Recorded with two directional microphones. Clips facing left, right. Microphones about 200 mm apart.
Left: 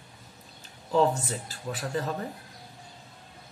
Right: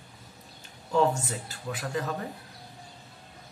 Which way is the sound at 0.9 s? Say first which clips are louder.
Left 1 dB; 30° left (ahead or behind).